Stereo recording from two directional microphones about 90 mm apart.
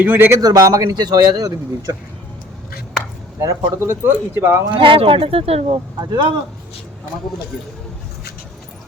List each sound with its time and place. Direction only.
0.0 s speech: 20° right (ahead or behind)
0.4 s speech: 45° right (ahead or behind)
3.4 s speech: 30° right (ahead or behind)
4.7 s speech: 75° right (ahead or behind); by 5.8 s 90° right
6.0 s speech: 55° right (ahead or behind)